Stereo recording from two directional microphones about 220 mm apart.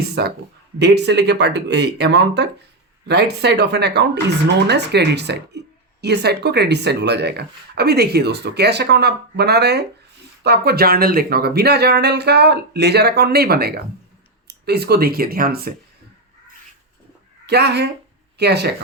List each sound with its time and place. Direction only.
0.1 s speech: 45° right (ahead or behind)
17.4 s speech: 50° right (ahead or behind)